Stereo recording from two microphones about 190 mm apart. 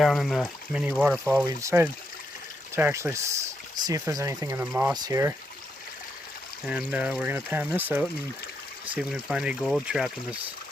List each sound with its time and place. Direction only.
0.0 s speech: centre (ahead or behind)
4.9 s speech: 20° right (ahead or behind)
6.7 s speech: 5° right (ahead or behind)